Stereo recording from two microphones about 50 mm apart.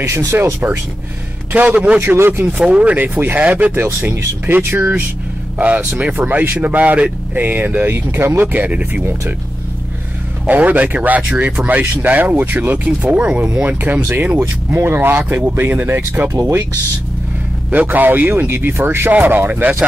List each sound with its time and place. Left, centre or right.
0.0 s speech: right
1.5 s a man's voice: right
2.0 s speech: right
2.6 s speech: right
5.6 s speech: right
10.4 s speech: right
11.6 s speech: right
14.8 s speech: right
17.8 s speech: right
19.2 s speech: right